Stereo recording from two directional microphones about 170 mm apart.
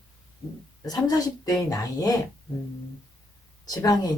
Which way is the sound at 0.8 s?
25° left (ahead or behind).